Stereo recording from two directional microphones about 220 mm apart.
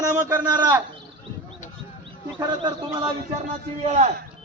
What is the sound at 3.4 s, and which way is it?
Speech, 30° right (ahead or behind).